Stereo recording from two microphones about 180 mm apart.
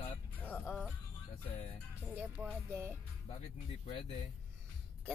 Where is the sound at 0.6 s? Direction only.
Centre (ahead or behind).